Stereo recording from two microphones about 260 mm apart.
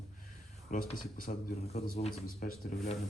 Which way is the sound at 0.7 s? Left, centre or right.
Left.